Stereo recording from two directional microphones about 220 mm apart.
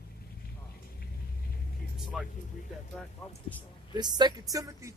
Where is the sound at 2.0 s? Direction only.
Centre (ahead or behind).